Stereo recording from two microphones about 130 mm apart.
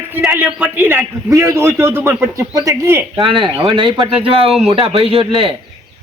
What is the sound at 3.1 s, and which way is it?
Speech, 40° right (ahead or behind).